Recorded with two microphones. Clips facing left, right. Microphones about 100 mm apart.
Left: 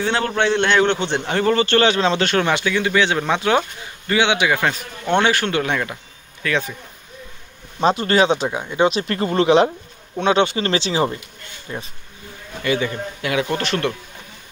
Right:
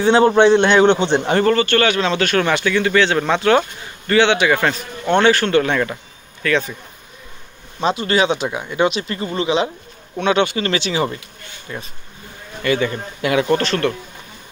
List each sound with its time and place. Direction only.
0.0 s a man's voice: 20° right (ahead or behind)
1.4 s a man's voice: 20° left (ahead or behind)
7.8 s speech: 40° left (ahead or behind); by 8.9 s 25° left (ahead or behind)
9.0 s speech: 60° left (ahead or behind)
10.1 s speech: 25° left (ahead or behind)
12.6 s a man's voice: 15° left (ahead or behind)
13.2 s a man's voice: centre (ahead or behind)